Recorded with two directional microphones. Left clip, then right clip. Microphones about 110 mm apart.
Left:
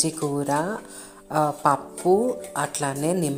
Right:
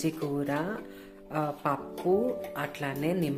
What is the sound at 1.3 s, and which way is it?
A woman's voice, 30° left (ahead or behind).